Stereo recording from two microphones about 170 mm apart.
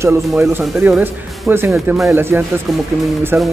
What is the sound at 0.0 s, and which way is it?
Speech, 15° right (ahead or behind).